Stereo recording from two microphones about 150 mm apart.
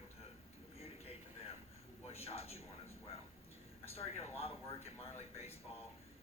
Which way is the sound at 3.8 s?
45° left (ahead or behind).